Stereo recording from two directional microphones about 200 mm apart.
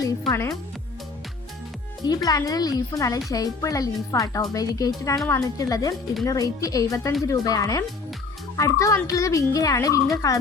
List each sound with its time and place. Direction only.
0.0 s speech: 15° left (ahead or behind)
2.0 s speech: 20° left (ahead or behind)